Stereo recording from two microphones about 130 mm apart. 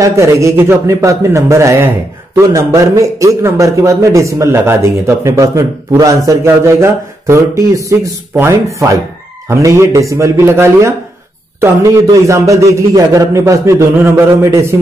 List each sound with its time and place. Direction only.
0.0 s a man's voice: 25° right (ahead or behind)